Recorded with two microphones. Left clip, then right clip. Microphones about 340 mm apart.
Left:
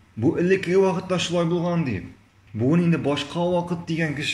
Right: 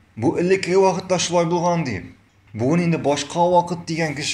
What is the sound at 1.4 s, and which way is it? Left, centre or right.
Speech, right.